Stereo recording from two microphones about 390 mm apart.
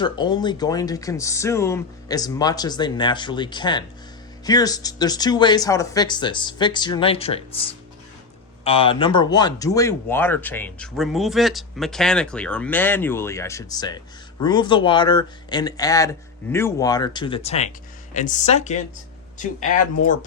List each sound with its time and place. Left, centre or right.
0.0 s speech: centre